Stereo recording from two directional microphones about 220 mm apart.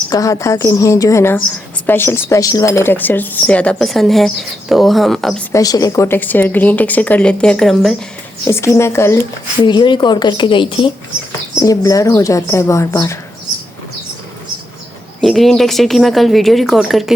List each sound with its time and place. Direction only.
0.1 s a woman's voice: 15° left (ahead or behind)
8.4 s a woman's voice: 10° left (ahead or behind)
15.2 s a woman's voice: centre (ahead or behind)